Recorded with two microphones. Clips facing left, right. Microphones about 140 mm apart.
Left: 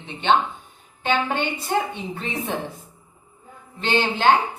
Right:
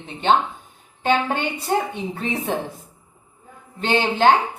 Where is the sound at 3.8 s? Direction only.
45° right (ahead or behind).